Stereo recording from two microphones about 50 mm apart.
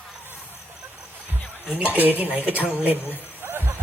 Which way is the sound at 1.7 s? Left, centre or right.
Right.